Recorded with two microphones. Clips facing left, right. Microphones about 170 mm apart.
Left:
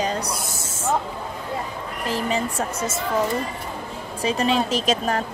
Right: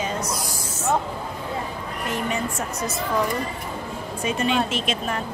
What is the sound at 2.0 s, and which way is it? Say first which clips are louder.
Speech: left 2 dB; 30° left (ahead or behind).